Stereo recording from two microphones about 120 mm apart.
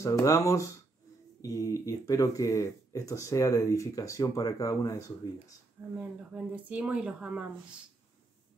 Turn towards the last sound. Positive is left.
turn(degrees=-10)  # may be behind; listen again after turning